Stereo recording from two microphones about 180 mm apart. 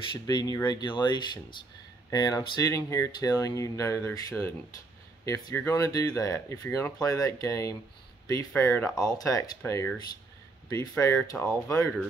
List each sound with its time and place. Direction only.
0.1 s speech: 25° left (ahead or behind)